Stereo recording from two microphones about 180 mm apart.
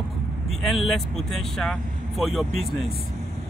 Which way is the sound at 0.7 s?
Centre (ahead or behind).